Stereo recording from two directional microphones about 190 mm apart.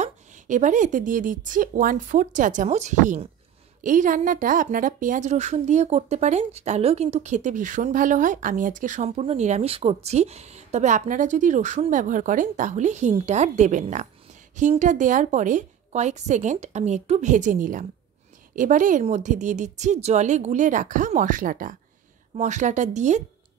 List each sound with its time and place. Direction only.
0.0 s a woman's voice: 40° right (ahead or behind)